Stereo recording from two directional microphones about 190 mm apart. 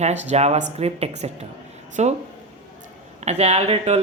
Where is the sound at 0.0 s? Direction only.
35° right (ahead or behind).